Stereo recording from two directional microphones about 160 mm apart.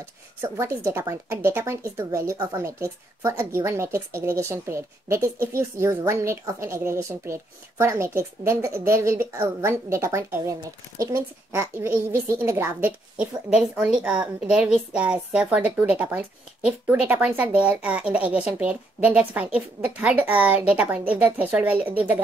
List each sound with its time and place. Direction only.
0.4 s a woman's voice: 15° right (ahead or behind)